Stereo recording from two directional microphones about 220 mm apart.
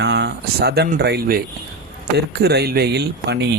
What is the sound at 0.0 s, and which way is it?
Speech, 50° right (ahead or behind).